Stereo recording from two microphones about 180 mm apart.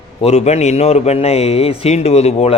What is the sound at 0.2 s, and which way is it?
Mantra, 35° left (ahead or behind).